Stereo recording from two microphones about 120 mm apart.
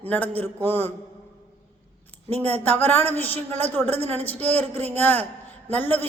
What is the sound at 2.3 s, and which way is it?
Speech, 60° right (ahead or behind).